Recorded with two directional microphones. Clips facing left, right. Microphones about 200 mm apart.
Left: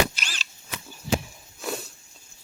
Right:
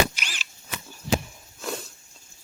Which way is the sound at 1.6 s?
5° left (ahead or behind).